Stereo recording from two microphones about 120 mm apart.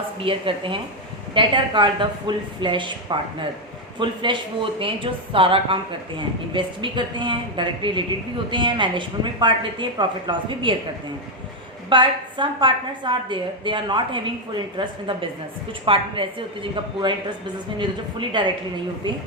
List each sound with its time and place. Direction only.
0.2 s a woman's voice: 45° right (ahead or behind)
11.9 s a woman's voice: 40° right (ahead or behind)